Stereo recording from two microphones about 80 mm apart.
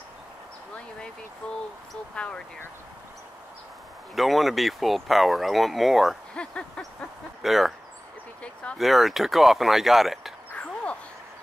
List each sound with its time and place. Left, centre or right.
1.4 s speech: centre
4.1 s speech: centre
6.3 s speech: centre
7.4 s speech: centre
8.7 s speech: centre
10.5 s a sound: centre